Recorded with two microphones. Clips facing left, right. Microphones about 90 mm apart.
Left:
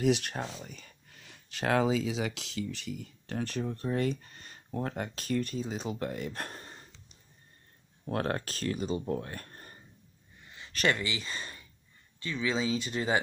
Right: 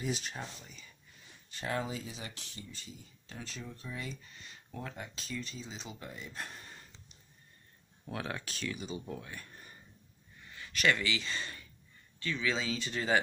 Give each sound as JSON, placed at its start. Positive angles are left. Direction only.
{"t": 0.0, "sound": "speech", "side_deg": 65}
{"t": 0.4, "sound": "speech", "side_deg": 40}
{"t": 4.9, "sound": "speech", "side_deg": 55}
{"t": 6.6, "sound": "gasp", "side_deg": 35}
{"t": 8.1, "sound": "speech", "side_deg": 50}
{"t": 10.7, "sound": "speech", "side_deg": 40}
{"t": 11.0, "sound": "speech", "side_deg": 25}